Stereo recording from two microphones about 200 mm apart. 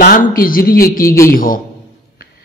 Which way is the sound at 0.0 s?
45° left (ahead or behind).